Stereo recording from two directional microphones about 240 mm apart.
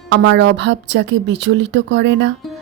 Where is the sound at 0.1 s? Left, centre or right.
Right.